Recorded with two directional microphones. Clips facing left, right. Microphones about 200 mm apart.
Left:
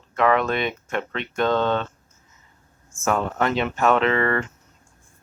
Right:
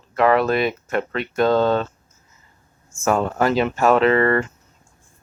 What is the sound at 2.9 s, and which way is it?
Speech, 15° left (ahead or behind).